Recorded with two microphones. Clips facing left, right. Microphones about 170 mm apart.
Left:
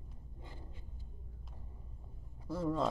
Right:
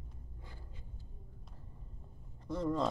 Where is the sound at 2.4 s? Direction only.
5° left (ahead or behind).